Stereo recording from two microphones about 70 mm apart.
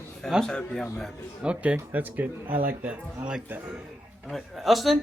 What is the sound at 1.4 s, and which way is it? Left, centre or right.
Speech, centre.